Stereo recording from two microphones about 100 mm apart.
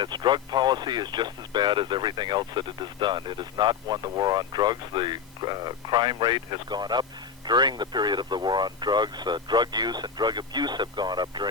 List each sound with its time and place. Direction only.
0.0 s speech: 50° right (ahead or behind)